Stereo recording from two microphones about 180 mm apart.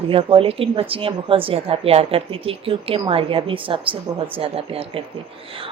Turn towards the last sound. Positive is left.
turn(degrees=-30)  # may be behind; listen again after turning